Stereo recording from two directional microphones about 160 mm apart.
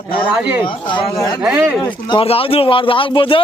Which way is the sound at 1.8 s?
30° left (ahead or behind).